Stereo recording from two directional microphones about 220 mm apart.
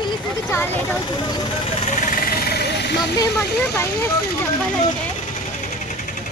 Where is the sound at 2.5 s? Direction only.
50° left (ahead or behind).